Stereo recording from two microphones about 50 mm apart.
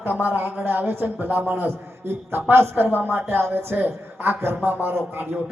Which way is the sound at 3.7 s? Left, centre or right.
Right.